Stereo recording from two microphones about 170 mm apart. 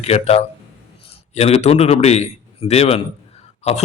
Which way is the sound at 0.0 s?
35° left (ahead or behind).